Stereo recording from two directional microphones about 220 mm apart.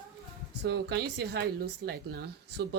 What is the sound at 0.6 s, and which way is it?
Speech, 50° right (ahead or behind).